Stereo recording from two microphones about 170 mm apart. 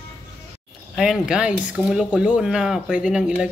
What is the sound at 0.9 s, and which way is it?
Speech, 5° right (ahead or behind).